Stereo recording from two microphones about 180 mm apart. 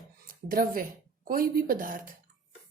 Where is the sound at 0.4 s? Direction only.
50° right (ahead or behind).